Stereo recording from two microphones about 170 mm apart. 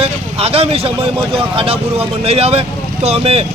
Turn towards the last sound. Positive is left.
turn(degrees=-35)  # may be behind; listen again after turning